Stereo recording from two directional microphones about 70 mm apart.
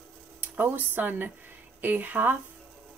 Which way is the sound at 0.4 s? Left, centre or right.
Right.